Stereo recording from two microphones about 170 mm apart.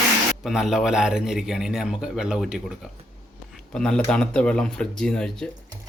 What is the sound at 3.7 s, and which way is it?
A man's voice, 5° left (ahead or behind).